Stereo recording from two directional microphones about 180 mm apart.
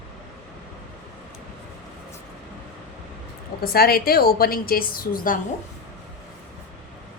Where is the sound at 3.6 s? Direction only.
55° left (ahead or behind).